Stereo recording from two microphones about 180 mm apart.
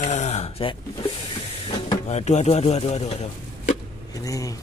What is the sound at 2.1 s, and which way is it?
Speech, 40° left (ahead or behind).